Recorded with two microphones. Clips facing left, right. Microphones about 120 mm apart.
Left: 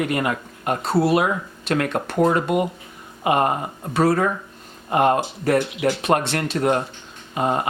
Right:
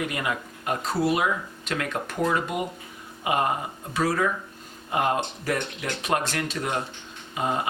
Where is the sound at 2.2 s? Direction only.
45° left (ahead or behind).